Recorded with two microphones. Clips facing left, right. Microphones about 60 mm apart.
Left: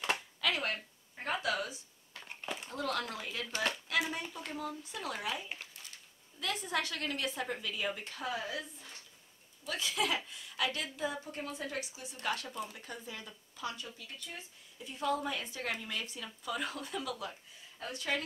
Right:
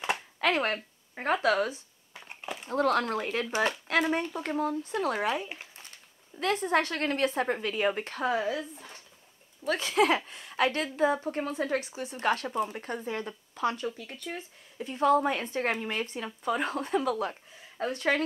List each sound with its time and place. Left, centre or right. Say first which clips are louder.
0.4 s speech: right 11 dB; right
2.4 s a sound: right 3 dB; centre
2.7 s speech: right 12 dB; right
3.4 s speech: right 5 dB; right
3.8 s speech: right 8 dB; right